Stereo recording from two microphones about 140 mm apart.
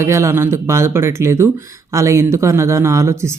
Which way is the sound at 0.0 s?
20° right (ahead or behind).